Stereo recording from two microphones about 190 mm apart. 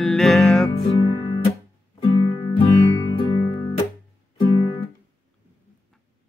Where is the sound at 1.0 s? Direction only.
25° left (ahead or behind).